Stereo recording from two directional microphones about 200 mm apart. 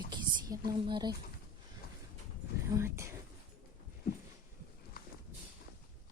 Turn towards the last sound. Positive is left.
turn(degrees=45)  # may be behind; listen again after turning